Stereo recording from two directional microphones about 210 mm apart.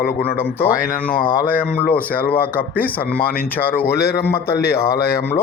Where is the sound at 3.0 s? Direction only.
45° left (ahead or behind).